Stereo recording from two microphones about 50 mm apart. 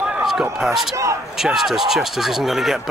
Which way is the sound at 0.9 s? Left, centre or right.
Right.